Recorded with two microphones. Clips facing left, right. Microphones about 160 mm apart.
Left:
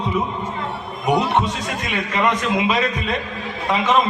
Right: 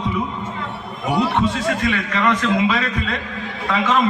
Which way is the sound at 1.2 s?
20° left (ahead or behind).